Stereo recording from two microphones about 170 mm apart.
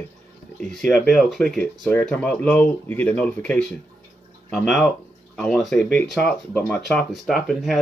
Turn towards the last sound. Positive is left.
turn(degrees=0)  # may be behind; listen again after turning